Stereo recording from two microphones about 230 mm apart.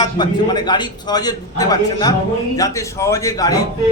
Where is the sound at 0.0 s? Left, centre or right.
Centre.